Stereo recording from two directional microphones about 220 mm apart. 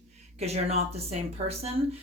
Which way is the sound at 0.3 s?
30° right (ahead or behind).